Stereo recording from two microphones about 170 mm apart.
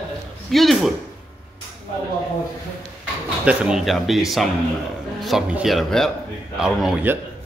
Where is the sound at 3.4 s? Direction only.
5° right (ahead or behind).